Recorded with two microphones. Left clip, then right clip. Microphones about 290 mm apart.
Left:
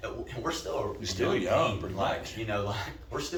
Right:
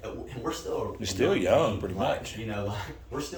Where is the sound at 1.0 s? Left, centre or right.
Right.